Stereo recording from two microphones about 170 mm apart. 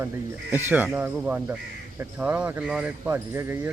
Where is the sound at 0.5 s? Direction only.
10° right (ahead or behind).